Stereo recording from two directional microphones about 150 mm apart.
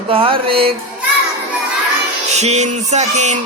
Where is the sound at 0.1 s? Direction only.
40° right (ahead or behind).